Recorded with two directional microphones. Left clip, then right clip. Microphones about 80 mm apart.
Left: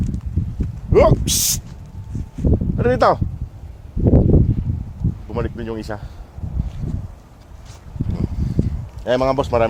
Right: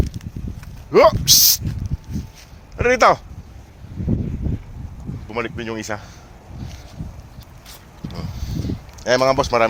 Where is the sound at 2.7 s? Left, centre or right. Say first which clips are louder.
Right 2 dB; left.